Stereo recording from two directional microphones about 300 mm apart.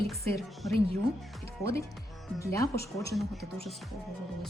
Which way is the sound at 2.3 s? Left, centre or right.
Centre.